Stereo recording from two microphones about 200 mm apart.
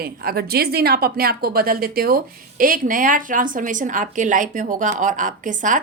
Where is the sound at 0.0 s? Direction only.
50° right (ahead or behind).